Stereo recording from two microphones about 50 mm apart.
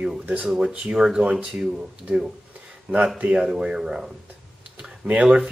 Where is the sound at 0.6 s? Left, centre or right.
Right.